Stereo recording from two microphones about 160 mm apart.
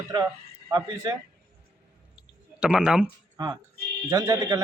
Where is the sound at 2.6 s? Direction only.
5° right (ahead or behind).